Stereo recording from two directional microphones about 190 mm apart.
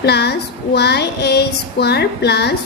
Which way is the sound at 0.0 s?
60° left (ahead or behind).